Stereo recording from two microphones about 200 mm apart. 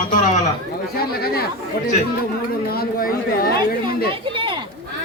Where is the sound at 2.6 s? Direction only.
45° left (ahead or behind).